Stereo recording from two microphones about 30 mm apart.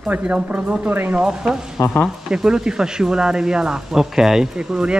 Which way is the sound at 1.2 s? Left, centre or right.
Right.